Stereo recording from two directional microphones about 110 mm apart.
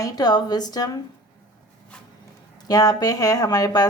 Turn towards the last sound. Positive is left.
turn(degrees=35)  # may be behind; listen again after turning